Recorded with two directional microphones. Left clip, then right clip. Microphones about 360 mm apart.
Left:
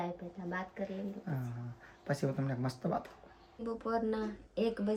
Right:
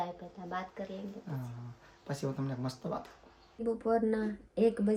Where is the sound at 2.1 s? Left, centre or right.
Centre.